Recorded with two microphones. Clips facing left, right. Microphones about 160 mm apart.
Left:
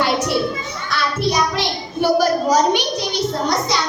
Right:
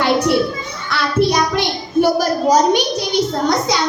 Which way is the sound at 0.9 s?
55° right (ahead or behind).